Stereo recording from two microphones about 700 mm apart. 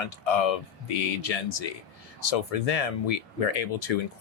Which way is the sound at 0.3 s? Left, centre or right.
Left.